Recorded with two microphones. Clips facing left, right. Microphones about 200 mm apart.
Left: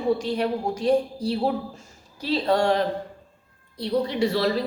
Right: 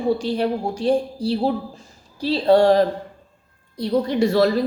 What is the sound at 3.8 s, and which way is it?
Speech, 45° right (ahead or behind).